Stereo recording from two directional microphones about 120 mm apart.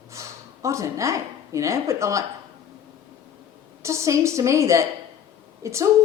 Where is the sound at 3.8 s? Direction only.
25° right (ahead or behind).